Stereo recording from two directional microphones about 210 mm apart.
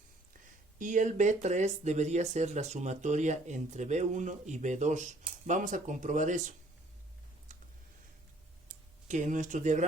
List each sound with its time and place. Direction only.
0.8 s speech: 35° right (ahead or behind)
9.0 s speech: 35° right (ahead or behind)